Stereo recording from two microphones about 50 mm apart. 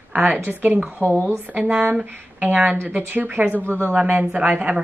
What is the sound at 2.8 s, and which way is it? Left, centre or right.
A woman's voice, right.